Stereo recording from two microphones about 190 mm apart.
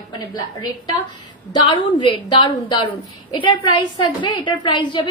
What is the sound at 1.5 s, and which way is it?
A woman's voice, 25° left (ahead or behind).